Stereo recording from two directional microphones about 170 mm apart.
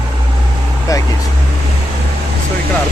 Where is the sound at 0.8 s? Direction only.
20° left (ahead or behind).